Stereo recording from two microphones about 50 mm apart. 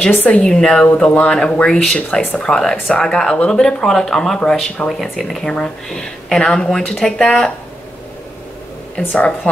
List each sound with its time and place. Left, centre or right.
0.1 s a woman's voice: left
0.4 s a woman's voice: centre
8.9 s speech: left